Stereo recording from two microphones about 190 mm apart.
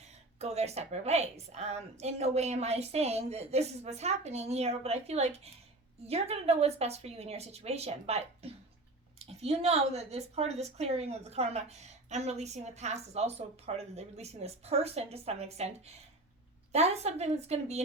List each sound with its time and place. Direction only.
0.0 s a woman's voice: 35° right (ahead or behind)
16.7 s a woman's voice: 35° right (ahead or behind)